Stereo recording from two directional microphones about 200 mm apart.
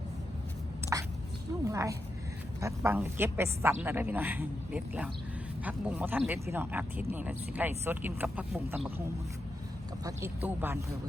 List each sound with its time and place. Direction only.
0.9 s a sound: 15° right (ahead or behind)
1.6 s a woman's voice: 15° right (ahead or behind)
10.0 s a woman's voice: 15° right (ahead or behind)